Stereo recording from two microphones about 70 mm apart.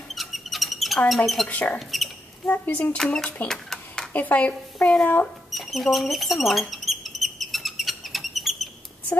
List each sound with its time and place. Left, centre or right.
0.1 s a sound: centre
1.5 s speech: left
1.8 s speech: centre
2.4 s speech: left
3.0 s speech: centre
3.4 s a sound: centre
4.1 s speech: left
5.5 s mouse: centre